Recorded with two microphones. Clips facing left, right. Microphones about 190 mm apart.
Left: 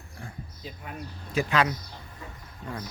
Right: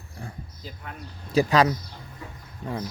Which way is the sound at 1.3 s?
40° right (ahead or behind).